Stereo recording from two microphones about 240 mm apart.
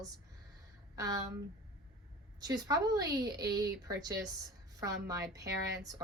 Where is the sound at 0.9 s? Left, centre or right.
Centre.